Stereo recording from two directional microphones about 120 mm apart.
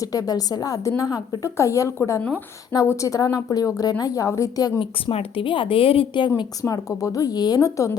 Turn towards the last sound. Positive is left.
turn(degrees=25)  # may be behind; listen again after turning